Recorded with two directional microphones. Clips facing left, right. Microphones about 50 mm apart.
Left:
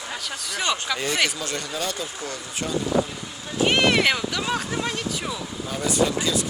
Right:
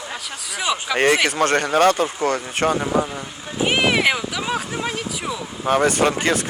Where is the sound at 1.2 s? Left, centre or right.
Right.